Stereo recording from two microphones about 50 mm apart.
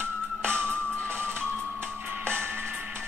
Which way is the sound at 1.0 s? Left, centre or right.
Left.